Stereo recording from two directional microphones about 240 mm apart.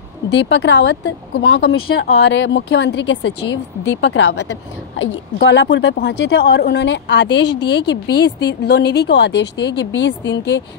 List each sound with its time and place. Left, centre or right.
0.3 s speech: left